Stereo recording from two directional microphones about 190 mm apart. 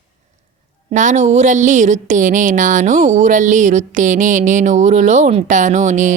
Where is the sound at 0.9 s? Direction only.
40° right (ahead or behind).